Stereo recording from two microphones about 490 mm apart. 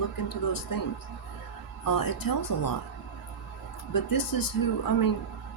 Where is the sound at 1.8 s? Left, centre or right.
Left.